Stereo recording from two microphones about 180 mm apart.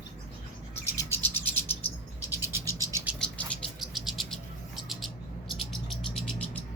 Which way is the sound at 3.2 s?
5° left (ahead or behind).